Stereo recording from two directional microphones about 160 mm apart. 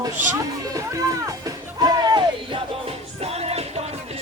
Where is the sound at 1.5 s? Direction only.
25° right (ahead or behind).